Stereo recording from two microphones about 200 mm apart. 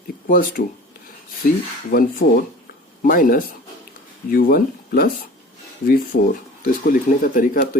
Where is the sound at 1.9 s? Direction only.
50° left (ahead or behind).